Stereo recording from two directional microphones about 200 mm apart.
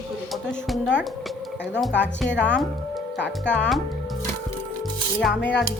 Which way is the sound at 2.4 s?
5° left (ahead or behind).